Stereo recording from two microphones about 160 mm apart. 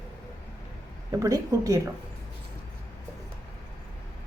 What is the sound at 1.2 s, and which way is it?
Speech, 20° right (ahead or behind).